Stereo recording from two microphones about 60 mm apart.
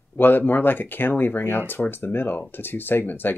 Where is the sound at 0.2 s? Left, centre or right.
Left.